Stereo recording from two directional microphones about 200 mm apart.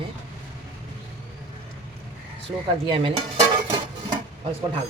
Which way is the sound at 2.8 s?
25° right (ahead or behind).